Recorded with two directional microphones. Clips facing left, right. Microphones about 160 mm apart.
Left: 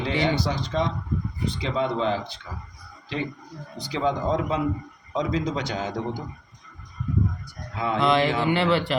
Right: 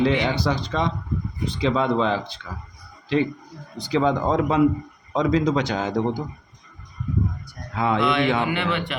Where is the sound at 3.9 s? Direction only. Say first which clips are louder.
Right 4 dB; 75° right (ahead or behind).